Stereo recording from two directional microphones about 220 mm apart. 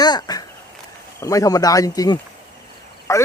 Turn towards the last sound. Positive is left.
turn(degrees=15)  # may be behind; listen again after turning